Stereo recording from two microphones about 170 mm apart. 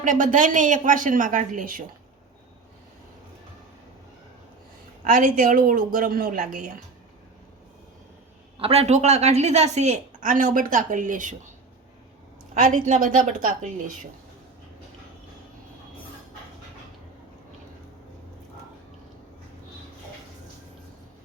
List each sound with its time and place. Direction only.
0.0 s a woman's voice: 50° right (ahead or behind)
5.0 s a woman's voice: 50° right (ahead or behind)
8.5 s a woman's voice: 35° right (ahead or behind)
12.5 s a woman's voice: 45° right (ahead or behind)